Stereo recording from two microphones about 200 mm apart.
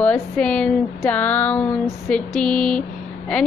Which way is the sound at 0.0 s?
5° left (ahead or behind).